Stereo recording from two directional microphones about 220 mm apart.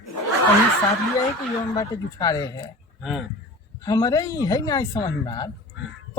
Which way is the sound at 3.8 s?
15° left (ahead or behind).